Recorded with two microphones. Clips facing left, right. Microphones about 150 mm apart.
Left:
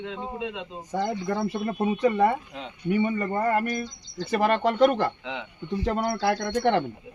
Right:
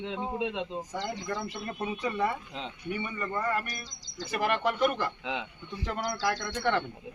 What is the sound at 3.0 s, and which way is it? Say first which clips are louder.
Speech: left 4 dB; 45° left (ahead or behind).